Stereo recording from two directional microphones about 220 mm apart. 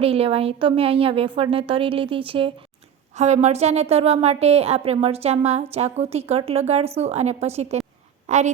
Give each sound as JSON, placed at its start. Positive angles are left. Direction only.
{"t": 0.0, "sound": "a woman's voice", "side_deg": -25}